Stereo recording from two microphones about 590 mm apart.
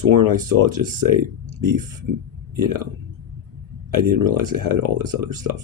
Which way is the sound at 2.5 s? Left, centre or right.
Right.